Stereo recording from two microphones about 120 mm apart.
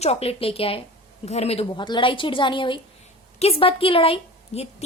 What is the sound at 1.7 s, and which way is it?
A woman's voice, 40° left (ahead or behind).